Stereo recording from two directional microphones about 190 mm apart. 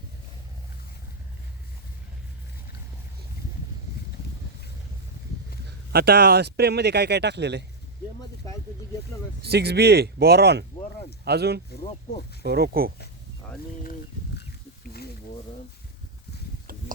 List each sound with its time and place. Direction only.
5.6 s speech: 55° right (ahead or behind)
9.4 s speech: 60° right (ahead or behind)
14.8 s wild animals: 55° left (ahead or behind)